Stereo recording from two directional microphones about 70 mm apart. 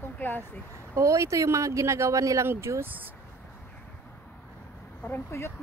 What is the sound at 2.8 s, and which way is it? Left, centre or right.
Speech, right.